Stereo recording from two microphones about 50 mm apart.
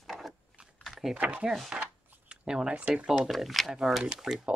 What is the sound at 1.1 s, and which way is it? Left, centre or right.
Speech, right.